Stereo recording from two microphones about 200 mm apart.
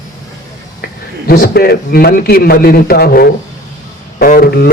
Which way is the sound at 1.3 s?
50° left (ahead or behind).